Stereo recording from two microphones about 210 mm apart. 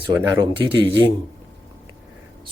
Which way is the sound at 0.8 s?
25° right (ahead or behind).